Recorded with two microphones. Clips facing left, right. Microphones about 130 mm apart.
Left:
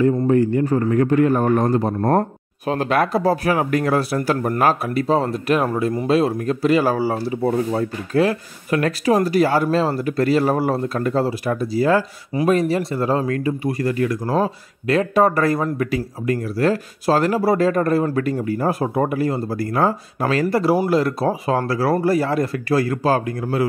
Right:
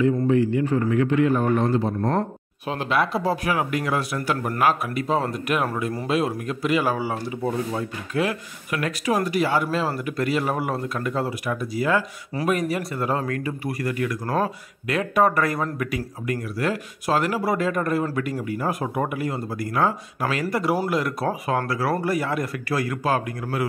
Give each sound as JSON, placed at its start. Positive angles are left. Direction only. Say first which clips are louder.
{"t": 0.3, "sound": "a man's voice", "louder": "left 3 dB", "side_deg": 45}